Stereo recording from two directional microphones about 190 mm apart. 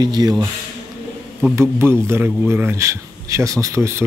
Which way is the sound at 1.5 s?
15° right (ahead or behind).